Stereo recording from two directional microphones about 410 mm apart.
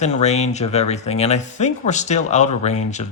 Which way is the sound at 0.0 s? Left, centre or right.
Centre.